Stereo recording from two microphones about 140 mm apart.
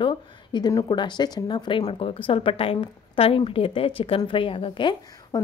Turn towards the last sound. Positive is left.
turn(degrees=35)  # may be behind; listen again after turning